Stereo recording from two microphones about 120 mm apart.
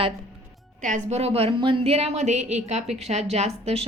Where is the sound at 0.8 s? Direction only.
90° right; by 2.4 s 75° right (ahead or behind).